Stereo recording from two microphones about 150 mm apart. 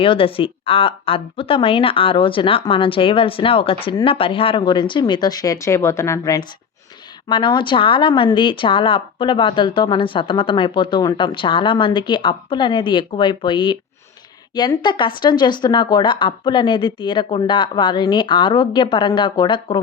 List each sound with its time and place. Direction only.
0.0 s a woman's voice: 35° left (ahead or behind); by 6.4 s 20° left (ahead or behind)
7.3 s a woman's voice: 30° left (ahead or behind)